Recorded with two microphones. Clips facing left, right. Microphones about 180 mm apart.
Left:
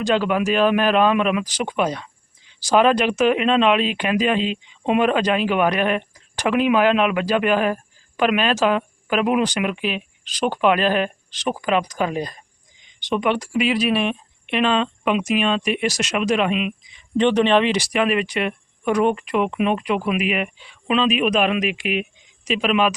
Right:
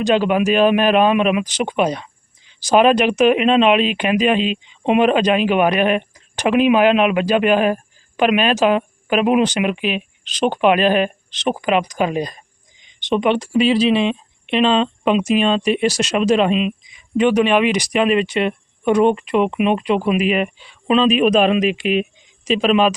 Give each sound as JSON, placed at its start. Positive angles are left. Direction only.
{"t": 0.0, "sound": "speech", "side_deg": -20}
{"t": 17.2, "sound": "speech", "side_deg": -10}